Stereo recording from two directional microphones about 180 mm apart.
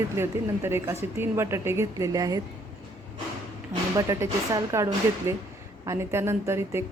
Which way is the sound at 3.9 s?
20° right (ahead or behind).